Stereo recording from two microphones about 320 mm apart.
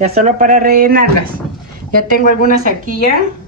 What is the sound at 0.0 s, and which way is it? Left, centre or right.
Speech, right.